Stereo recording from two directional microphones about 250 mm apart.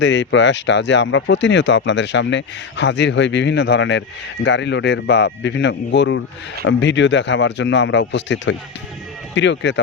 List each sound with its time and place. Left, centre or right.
0.0 s speech: left